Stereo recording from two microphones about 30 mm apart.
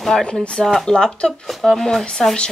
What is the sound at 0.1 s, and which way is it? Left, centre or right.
Speech, centre.